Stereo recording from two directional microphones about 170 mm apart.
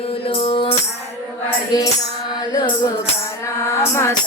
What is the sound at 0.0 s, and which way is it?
Music, 30° left (ahead or behind).